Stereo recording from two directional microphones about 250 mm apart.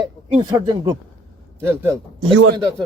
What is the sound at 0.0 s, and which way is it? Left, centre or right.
Speech, centre.